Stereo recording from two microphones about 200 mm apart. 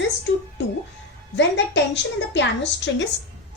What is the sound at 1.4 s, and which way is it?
Speech, 65° left (ahead or behind).